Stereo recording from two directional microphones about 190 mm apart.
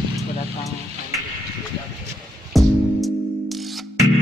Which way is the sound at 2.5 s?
Centre (ahead or behind).